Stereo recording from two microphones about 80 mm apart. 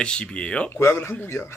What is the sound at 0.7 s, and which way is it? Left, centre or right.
Speech, left.